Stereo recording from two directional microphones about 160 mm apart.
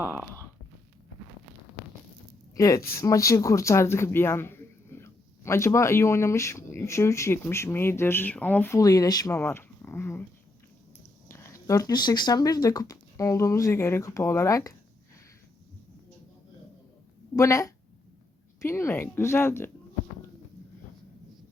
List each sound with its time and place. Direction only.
0.0 s speech: 15° right (ahead or behind)
2.6 s speech: 20° left (ahead or behind)
11.3 s speech: 15° left (ahead or behind)
17.3 s speech: 20° left (ahead or behind)